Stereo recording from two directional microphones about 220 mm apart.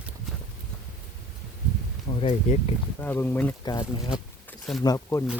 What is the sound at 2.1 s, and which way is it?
Speech, 25° left (ahead or behind).